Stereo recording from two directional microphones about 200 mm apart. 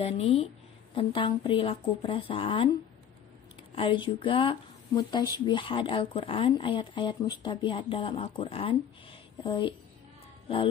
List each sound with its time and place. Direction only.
0.0 s speech: 30° left (ahead or behind)
3.7 s speech: 25° left (ahead or behind)